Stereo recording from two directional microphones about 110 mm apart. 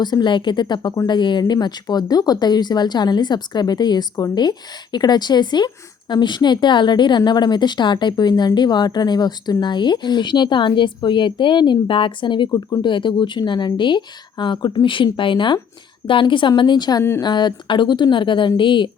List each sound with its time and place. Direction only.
0.0 s speech: 40° left (ahead or behind)
12.5 s speech: 35° left (ahead or behind)